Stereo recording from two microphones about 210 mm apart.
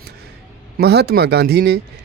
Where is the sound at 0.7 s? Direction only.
50° right (ahead or behind).